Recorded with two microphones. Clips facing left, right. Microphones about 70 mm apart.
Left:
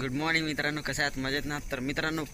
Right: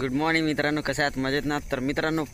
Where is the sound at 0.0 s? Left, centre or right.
Right.